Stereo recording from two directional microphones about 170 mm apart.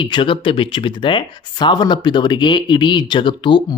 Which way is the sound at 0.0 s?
30° left (ahead or behind).